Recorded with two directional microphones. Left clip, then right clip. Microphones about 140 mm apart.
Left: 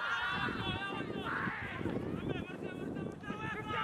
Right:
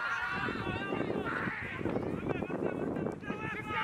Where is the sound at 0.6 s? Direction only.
20° left (ahead or behind).